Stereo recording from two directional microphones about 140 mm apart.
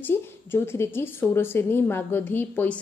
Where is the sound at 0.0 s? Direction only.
15° left (ahead or behind).